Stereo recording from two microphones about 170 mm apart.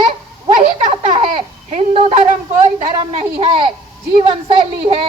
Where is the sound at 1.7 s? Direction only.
40° right (ahead or behind).